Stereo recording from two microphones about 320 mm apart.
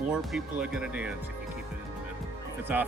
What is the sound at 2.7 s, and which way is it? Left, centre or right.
Speech, centre.